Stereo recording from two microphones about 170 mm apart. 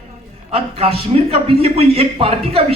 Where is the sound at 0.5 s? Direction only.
35° right (ahead or behind).